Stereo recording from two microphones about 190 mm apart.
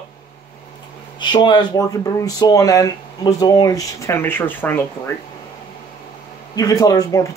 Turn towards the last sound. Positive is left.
turn(degrees=15)  # may be behind; listen again after turning